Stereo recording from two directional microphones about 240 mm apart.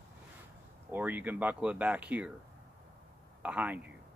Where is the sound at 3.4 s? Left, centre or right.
Centre.